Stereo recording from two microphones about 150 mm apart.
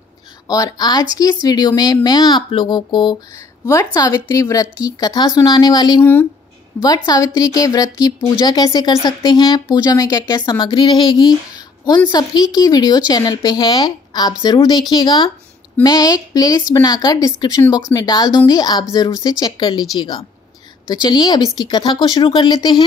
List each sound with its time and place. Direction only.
0.5 s a woman's voice: 25° left (ahead or behind)
6.7 s a woman's voice: 10° left (ahead or behind)
7.1 s a woman's voice: 25° left (ahead or behind)